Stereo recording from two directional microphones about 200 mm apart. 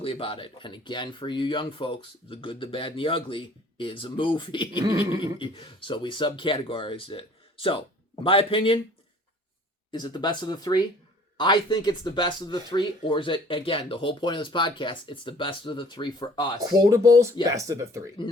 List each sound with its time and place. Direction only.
0.0 s speech: 25° left (ahead or behind)
4.8 s speech: 15° right (ahead or behind)
5.4 s speech: 25° left (ahead or behind)
9.9 s speech: 20° left (ahead or behind)
16.6 s speech: 20° right (ahead or behind)